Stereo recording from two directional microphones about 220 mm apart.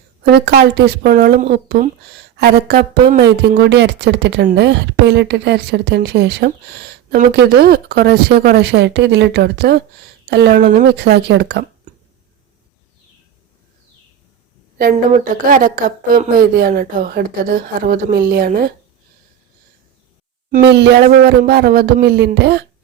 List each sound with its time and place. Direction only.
0.3 s a woman's voice: 50° right (ahead or behind)
11.9 s a sound: 35° right (ahead or behind)
15.1 s a woman's voice: 40° right (ahead or behind)
20.5 s a woman's voice: 50° right (ahead or behind)